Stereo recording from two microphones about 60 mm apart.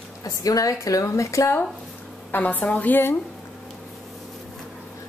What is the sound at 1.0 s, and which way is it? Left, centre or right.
Speech, left.